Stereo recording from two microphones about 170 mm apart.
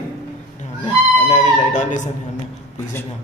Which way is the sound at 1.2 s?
45° left (ahead or behind).